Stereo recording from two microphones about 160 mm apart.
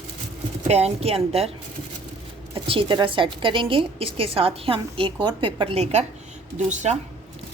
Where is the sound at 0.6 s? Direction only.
40° right (ahead or behind).